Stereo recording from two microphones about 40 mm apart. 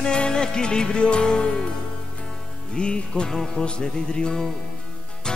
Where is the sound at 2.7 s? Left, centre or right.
Left.